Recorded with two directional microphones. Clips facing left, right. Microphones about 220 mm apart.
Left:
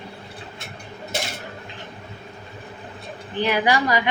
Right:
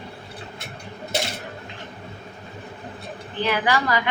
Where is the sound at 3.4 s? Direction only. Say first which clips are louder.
Left 2 dB; 15° left (ahead or behind).